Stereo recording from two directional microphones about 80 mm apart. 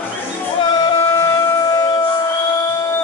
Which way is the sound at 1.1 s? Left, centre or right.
Left.